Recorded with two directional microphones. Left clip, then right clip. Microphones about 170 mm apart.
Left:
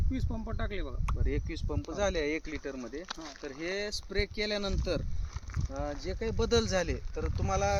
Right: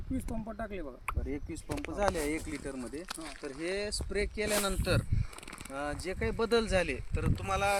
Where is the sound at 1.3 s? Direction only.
80° right.